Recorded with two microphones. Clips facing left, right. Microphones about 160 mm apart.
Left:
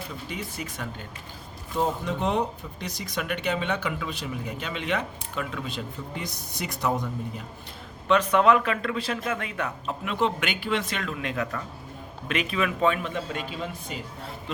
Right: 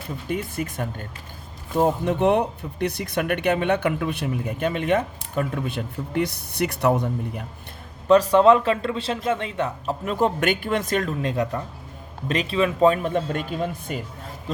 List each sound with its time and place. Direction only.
0.3 s speech: 50° right (ahead or behind)
8.0 s speech: 35° right (ahead or behind)